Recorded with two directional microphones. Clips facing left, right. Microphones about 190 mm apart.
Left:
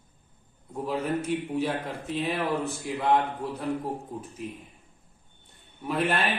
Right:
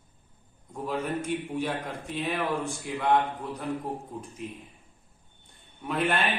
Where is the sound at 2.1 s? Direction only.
35° left (ahead or behind).